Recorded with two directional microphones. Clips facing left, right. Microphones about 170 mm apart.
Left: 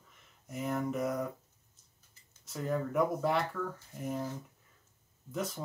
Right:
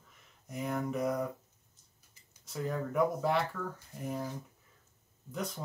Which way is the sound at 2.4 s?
Centre (ahead or behind).